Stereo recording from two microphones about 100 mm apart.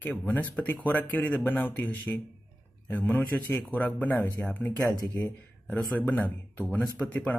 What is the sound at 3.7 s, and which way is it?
Speech, 15° left (ahead or behind).